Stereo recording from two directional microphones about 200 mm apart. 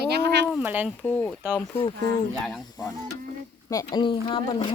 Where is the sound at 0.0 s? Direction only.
55° right (ahead or behind).